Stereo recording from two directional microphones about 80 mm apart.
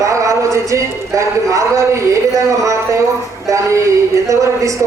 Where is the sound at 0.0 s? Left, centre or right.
Right.